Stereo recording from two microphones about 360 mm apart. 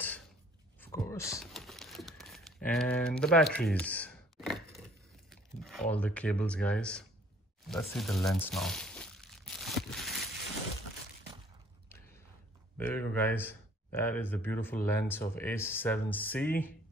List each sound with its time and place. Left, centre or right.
0.7 s crumpling: centre
5.3 s speech: centre
7.6 s crumpling: centre
12.7 s speech: centre